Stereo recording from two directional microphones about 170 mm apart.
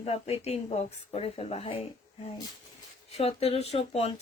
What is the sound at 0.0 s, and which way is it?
Speech, 35° left (ahead or behind).